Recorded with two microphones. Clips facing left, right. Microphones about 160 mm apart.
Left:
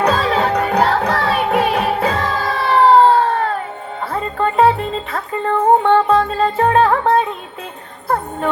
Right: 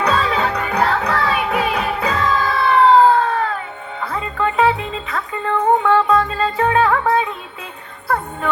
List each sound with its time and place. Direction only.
0.1 s music: 40° left (ahead or behind)